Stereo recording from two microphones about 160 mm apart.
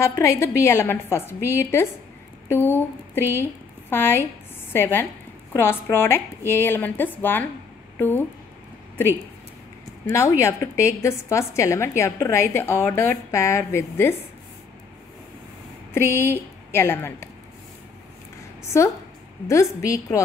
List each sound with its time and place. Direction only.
0.0 s a woman's voice: 15° left (ahead or behind)
3.9 s a woman's voice: 15° left (ahead or behind)
10.0 s a woman's voice: 20° left (ahead or behind)
15.9 s a woman's voice: 15° left (ahead or behind)
18.6 s a woman's voice: 15° left (ahead or behind)